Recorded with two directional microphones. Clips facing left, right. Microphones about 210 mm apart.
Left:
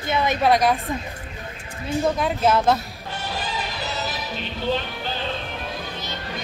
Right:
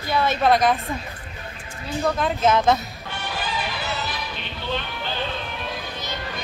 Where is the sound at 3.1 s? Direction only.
35° left (ahead or behind).